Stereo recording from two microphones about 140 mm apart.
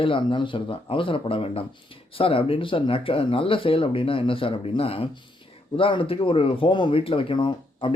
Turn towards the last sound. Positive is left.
turn(degrees=35)  # may be behind; listen again after turning